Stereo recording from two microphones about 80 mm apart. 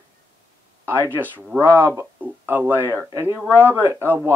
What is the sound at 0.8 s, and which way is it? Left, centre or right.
Speech, right.